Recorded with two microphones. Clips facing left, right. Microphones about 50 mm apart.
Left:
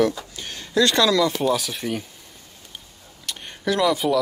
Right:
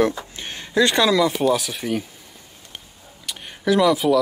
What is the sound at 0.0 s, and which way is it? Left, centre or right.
Speech, right.